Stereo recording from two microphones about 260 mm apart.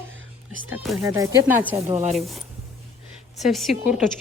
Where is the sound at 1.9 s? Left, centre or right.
Right.